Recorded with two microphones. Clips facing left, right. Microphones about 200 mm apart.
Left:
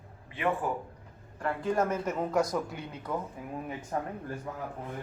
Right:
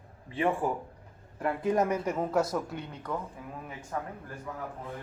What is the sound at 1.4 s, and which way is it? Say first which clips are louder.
Speech: right 2 dB; 20° right (ahead or behind).